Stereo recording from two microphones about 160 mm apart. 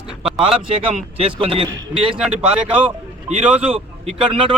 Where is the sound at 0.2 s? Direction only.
Centre (ahead or behind).